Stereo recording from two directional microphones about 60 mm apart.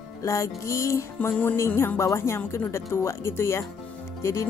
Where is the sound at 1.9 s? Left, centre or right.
Left.